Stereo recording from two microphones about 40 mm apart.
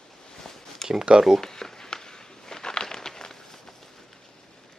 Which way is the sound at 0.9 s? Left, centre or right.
Centre.